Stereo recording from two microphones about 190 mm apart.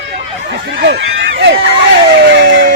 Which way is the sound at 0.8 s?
60° right (ahead or behind).